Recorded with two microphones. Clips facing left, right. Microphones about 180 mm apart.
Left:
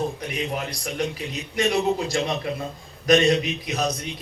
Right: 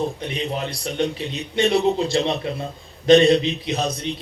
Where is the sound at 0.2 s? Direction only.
30° right (ahead or behind).